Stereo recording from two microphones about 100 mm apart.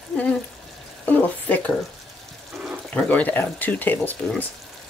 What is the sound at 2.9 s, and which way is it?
Speech, 10° left (ahead or behind).